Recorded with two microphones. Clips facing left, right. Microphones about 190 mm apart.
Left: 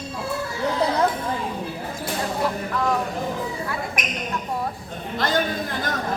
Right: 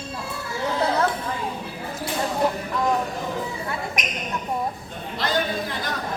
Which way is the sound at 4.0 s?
55° left (ahead or behind).